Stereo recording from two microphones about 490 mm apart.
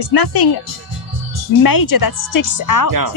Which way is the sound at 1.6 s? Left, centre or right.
Left.